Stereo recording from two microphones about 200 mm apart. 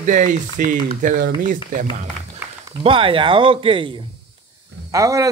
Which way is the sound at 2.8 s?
25° right (ahead or behind).